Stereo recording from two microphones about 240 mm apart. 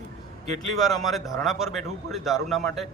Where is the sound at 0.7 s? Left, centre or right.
Centre.